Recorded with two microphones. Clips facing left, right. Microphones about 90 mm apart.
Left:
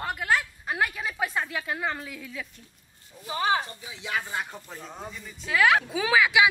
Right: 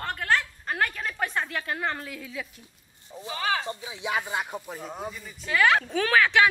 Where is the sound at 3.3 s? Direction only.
20° left (ahead or behind).